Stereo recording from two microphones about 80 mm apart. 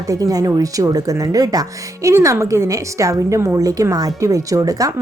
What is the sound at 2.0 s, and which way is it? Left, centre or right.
Speech, right.